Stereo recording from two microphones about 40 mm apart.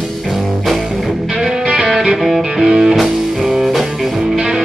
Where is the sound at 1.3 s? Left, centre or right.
Centre.